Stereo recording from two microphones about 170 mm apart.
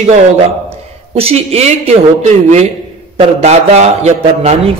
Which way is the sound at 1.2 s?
35° right (ahead or behind).